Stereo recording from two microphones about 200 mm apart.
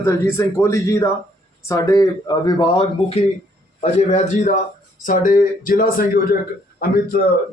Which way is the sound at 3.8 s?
35° left (ahead or behind).